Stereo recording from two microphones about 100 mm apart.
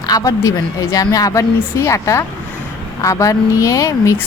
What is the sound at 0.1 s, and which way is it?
A man's voice, 35° left (ahead or behind).